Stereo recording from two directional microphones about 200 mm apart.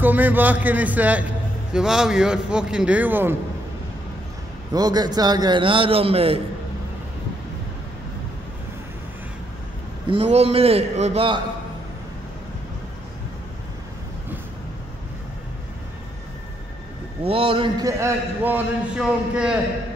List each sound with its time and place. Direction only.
0.0 s a man's voice: 10° right (ahead or behind)
4.7 s a man's voice: 20° right (ahead or behind)
10.0 s a man's voice: 30° right (ahead or behind)
17.2 s a man's voice: 30° right (ahead or behind); by 19.6 s 5° right (ahead or behind)